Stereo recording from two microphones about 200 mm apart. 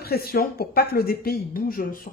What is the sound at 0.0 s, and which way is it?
Speech, 50° left (ahead or behind).